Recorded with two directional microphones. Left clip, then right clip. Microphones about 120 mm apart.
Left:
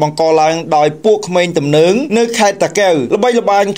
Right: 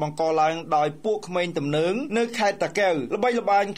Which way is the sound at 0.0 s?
15° left (ahead or behind).